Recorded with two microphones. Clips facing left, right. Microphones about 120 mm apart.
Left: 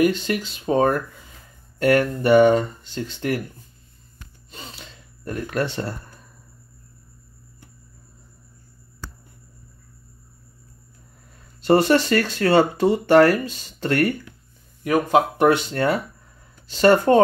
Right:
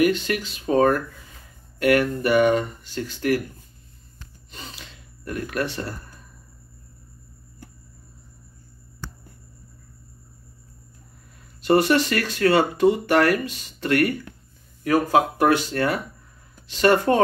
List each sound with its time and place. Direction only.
0.0 s speech: 25° left (ahead or behind)
4.6 s gasp: 30° left (ahead or behind)
11.6 s speech: 30° left (ahead or behind)
14.8 s speech: 20° left (ahead or behind)